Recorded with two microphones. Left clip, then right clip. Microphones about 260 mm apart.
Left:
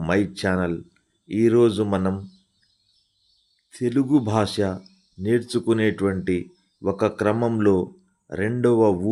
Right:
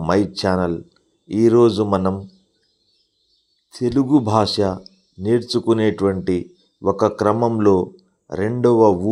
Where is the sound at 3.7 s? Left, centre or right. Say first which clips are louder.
Right 4 dB; centre.